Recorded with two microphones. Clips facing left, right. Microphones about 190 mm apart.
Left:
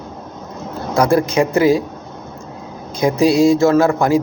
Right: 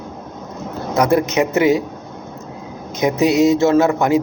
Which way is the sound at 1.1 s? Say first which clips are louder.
Left 1 dB; 20° right (ahead or behind).